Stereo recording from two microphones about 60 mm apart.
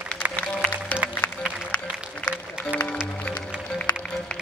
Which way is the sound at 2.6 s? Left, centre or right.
Left.